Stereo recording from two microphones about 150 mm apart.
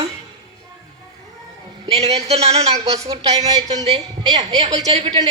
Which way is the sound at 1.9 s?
45° right (ahead or behind).